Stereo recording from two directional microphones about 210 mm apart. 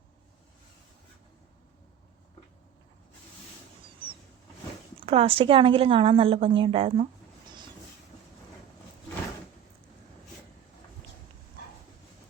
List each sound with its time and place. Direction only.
5.0 s a woman's voice: 25° right (ahead or behind)